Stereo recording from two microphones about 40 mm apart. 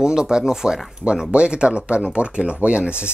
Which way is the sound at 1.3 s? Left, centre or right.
Right.